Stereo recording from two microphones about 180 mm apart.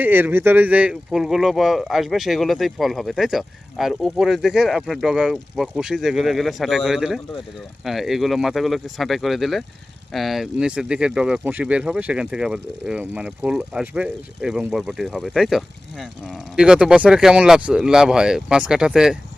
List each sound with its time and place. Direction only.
0.0 s speech: 10° right (ahead or behind)